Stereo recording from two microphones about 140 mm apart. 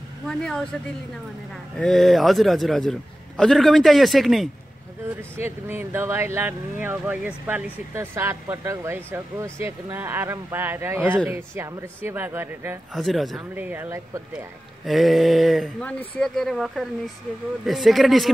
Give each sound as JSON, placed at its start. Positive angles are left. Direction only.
{"t": 0.3, "sound": "a man's voice", "side_deg": 5}
{"t": 1.8, "sound": "a man's voice", "side_deg": 5}
{"t": 5.4, "sound": "speech", "side_deg": -15}
{"t": 12.9, "sound": "a man's voice", "side_deg": 0}
{"t": 13.6, "sound": "speech", "side_deg": -15}
{"t": 14.9, "sound": "a man's voice", "side_deg": 0}